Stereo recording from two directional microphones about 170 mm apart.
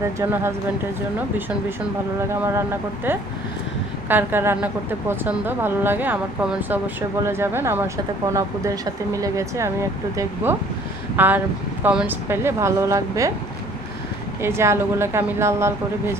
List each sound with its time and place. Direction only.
0.0 s a woman's voice: 15° right (ahead or behind)
2.3 s a woman's voice: 15° right (ahead or behind)
11.2 s a woman's voice: 10° right (ahead or behind)
14.4 s a woman's voice: 15° right (ahead or behind)